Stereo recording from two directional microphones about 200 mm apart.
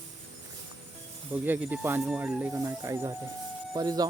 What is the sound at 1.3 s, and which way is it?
Speech, 10° right (ahead or behind).